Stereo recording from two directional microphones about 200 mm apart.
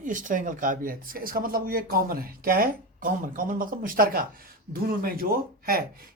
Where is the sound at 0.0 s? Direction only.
40° right (ahead or behind).